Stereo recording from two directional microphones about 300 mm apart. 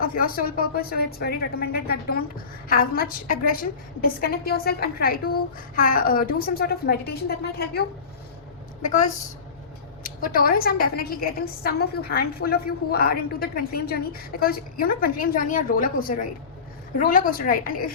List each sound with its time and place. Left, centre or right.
0.0 s a woman's voice: left